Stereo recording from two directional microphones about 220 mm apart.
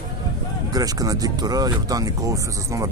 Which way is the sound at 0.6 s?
15° right (ahead or behind).